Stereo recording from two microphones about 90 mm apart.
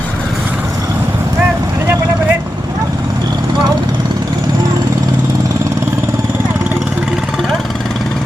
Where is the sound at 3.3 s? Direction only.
50° right (ahead or behind).